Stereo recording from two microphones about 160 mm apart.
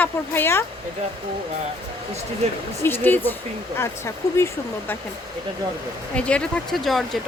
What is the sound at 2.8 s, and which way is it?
Speech, 15° left (ahead or behind).